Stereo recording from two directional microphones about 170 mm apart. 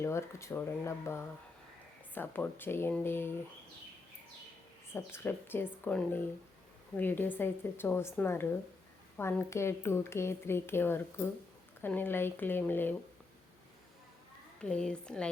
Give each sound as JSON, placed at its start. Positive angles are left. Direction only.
{"t": 0.0, "sound": "speech", "side_deg": 15}
{"t": 4.9, "sound": "speech", "side_deg": 15}
{"t": 14.6, "sound": "speech", "side_deg": 5}